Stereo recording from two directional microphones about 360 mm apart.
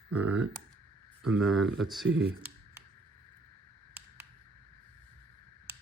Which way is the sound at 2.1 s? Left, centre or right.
Right.